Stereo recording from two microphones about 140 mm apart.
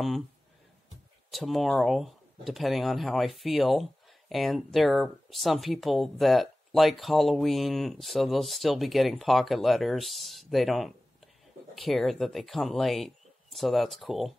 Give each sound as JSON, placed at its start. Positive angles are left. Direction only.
{"t": 1.3, "sound": "speech", "side_deg": 0}